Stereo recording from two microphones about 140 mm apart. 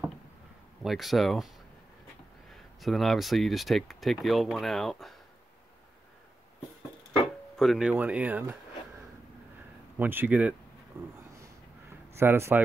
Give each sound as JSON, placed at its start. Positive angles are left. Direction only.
{"t": 0.8, "sound": "speech", "side_deg": 0}
{"t": 2.5, "sound": "speech", "side_deg": 0}
{"t": 7.5, "sound": "speech", "side_deg": 0}
{"t": 7.9, "sound": "speech", "side_deg": -10}
{"t": 9.9, "sound": "speech", "side_deg": -15}
{"t": 12.2, "sound": "speech", "side_deg": -15}